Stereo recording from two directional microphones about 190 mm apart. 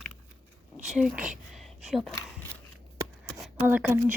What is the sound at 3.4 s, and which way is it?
Speech, 10° right (ahead or behind).